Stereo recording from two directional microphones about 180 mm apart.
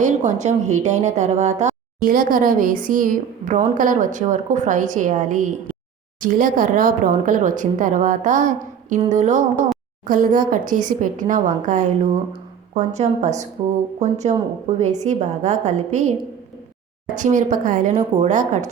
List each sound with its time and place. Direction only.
0.0 s a woman's voice: 40° right (ahead or behind)
17.2 s a woman's voice: 45° right (ahead or behind)